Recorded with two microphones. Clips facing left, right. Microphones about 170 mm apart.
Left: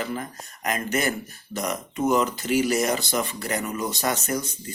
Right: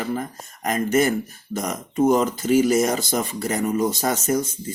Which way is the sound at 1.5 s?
45° right (ahead or behind).